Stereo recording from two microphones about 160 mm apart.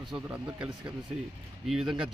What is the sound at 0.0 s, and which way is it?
A man's voice, 5° right (ahead or behind).